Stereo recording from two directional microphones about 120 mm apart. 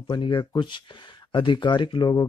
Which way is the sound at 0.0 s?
40° left (ahead or behind).